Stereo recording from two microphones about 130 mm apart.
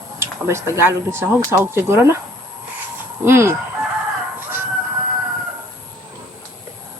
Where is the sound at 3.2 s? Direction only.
20° right (ahead or behind).